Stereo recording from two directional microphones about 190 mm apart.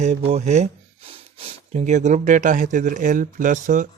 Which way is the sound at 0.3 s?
35° right (ahead or behind).